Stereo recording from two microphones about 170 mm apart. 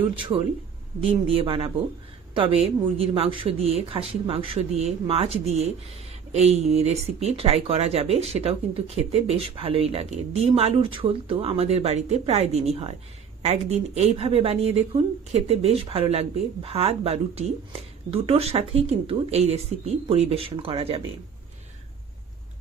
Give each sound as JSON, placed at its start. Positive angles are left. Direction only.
{"t": 0.0, "sound": "speech", "side_deg": -30}